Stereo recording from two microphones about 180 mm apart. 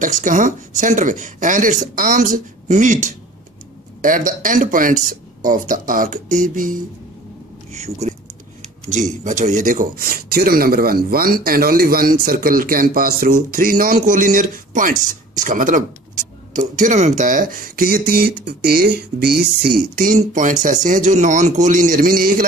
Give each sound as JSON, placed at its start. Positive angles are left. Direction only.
{"t": 0.0, "sound": "speech", "side_deg": -45}
{"t": 9.2, "sound": "speech", "side_deg": -45}